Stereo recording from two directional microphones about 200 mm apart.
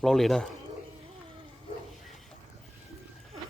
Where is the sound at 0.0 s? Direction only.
Centre (ahead or behind).